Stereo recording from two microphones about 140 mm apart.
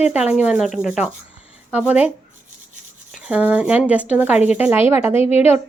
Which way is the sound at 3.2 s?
5° right (ahead or behind).